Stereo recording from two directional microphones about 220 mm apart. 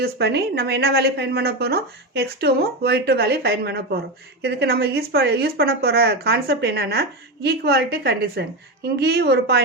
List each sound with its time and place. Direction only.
0.0 s a woman's voice: 50° right (ahead or behind)